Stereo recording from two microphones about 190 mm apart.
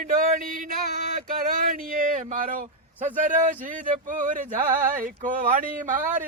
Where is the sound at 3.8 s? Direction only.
45° right (ahead or behind).